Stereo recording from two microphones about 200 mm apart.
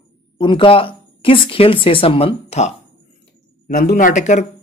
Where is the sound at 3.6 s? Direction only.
45° left (ahead or behind).